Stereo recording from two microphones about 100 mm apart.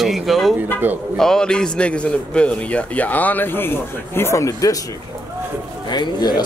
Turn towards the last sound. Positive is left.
turn(degrees=45)  # may be behind; listen again after turning